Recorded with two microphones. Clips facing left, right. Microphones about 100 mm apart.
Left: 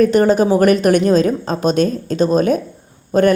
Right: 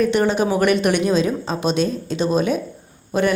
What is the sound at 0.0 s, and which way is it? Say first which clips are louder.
A woman's voice: left 5 dB; 40° left (ahead or behind).